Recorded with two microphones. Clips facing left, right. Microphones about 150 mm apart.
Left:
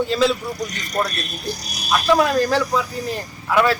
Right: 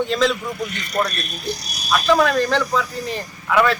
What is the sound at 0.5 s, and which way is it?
Speech, 40° left (ahead or behind).